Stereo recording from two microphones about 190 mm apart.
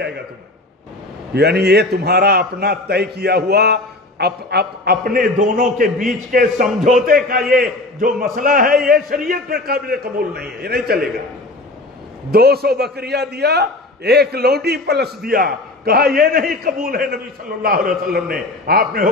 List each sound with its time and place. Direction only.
1.3 s a man's voice: 55° right (ahead or behind)
12.3 s a man's voice: 55° right (ahead or behind)